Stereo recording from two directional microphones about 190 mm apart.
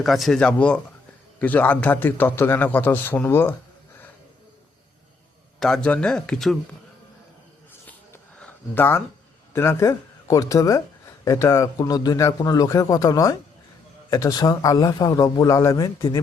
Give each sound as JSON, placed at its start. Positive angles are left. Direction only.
{"t": 0.0, "sound": "a man's voice", "side_deg": 0}
{"t": 5.5, "sound": "speech", "side_deg": 0}
{"t": 7.9, "sound": "a sound", "side_deg": 10}
{"t": 9.5, "sound": "a man's voice", "side_deg": 15}